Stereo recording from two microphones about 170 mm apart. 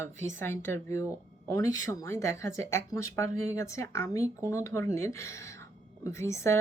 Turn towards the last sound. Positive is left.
turn(degrees=15)  # may be behind; listen again after turning